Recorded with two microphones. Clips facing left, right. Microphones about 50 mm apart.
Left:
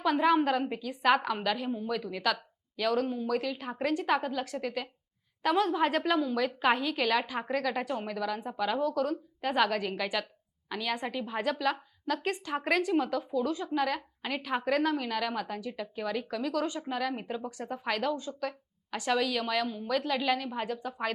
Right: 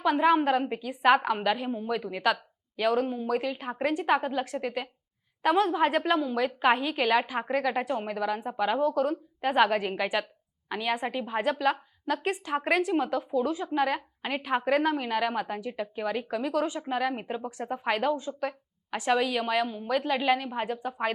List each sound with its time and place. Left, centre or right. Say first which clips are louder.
0.0 s a woman's voice: right 2 dB; centre